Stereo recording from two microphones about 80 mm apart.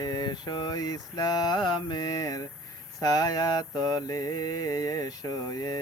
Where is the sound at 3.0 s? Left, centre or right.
Left.